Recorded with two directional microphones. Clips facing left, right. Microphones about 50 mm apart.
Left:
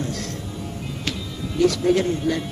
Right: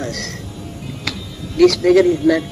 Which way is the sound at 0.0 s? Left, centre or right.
Right.